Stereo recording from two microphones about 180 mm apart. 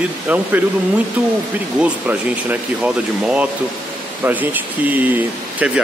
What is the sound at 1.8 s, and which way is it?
Speech, 10° right (ahead or behind).